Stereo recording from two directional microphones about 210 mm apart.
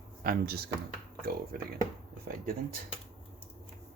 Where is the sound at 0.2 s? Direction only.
45° right (ahead or behind).